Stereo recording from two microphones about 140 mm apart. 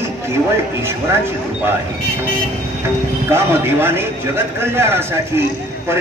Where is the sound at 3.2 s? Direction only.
15° right (ahead or behind).